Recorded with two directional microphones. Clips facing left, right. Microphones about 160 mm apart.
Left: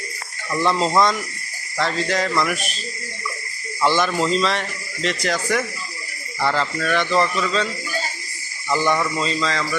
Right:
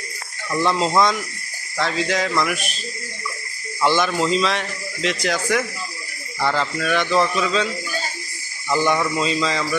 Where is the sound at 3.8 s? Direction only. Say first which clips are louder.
Even; centre (ahead or behind).